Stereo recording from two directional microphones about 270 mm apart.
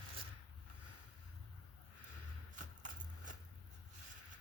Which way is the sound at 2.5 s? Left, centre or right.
Right.